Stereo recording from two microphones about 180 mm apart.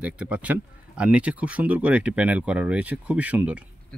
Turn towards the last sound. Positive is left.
turn(degrees=-10)  # may be behind; listen again after turning